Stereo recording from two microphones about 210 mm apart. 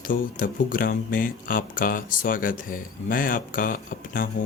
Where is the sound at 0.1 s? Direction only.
40° left (ahead or behind).